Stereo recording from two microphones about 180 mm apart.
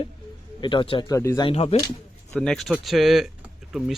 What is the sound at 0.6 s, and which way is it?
Speech, 25° left (ahead or behind).